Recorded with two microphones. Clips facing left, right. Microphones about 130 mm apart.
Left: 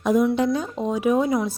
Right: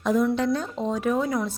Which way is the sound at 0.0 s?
10° left (ahead or behind).